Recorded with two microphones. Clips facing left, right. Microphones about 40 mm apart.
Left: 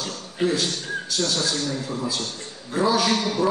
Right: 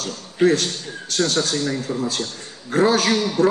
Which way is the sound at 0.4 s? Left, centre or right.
Right.